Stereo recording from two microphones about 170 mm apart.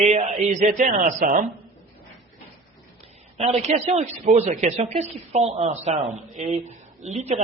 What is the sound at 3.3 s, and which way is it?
A man's voice, 40° right (ahead or behind).